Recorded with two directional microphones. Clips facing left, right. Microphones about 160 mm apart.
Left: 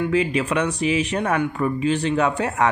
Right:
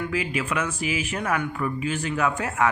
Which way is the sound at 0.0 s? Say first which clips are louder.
Left 7 dB; 35° left (ahead or behind).